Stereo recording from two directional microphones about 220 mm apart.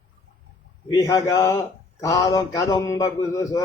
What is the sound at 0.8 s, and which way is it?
A man's voice, 15° left (ahead or behind).